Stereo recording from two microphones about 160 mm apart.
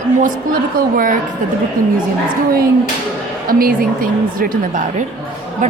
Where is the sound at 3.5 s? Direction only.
60° right (ahead or behind).